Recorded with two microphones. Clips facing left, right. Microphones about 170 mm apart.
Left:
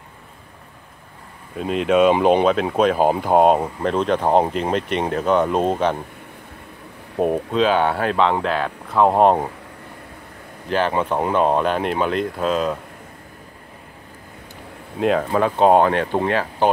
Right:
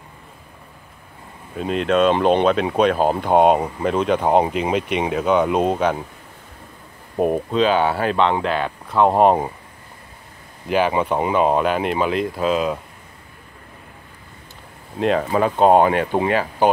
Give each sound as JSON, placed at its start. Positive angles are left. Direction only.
{"t": 1.6, "sound": "speech", "side_deg": 0}
{"t": 7.2, "sound": "speech", "side_deg": 0}
{"t": 10.7, "sound": "speech", "side_deg": -5}
{"t": 15.0, "sound": "speech", "side_deg": 0}